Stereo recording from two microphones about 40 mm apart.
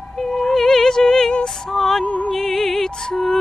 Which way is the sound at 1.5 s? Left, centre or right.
Centre.